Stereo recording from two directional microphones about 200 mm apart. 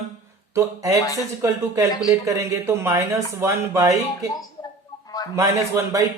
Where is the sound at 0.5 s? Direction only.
15° right (ahead or behind).